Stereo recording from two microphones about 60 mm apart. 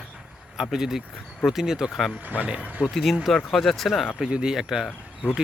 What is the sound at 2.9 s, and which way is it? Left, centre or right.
Speech, centre.